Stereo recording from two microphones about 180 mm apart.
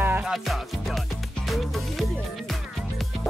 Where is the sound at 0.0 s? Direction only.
5° right (ahead or behind).